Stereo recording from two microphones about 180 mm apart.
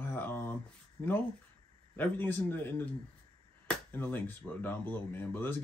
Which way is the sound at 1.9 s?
10° left (ahead or behind).